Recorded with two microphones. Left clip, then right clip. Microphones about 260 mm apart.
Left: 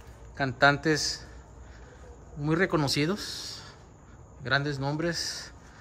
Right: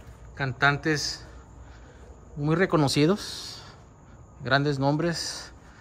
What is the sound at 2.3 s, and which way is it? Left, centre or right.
Speech, centre.